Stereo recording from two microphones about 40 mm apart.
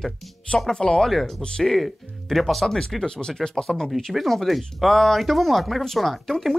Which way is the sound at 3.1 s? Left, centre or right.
Left.